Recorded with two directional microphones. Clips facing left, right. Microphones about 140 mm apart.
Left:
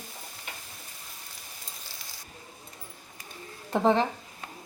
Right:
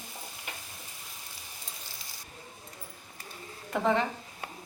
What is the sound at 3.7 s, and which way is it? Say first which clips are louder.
Speech: left 4 dB; 30° left (ahead or behind).